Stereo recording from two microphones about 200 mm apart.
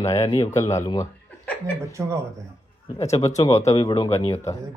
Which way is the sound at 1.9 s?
15° right (ahead or behind).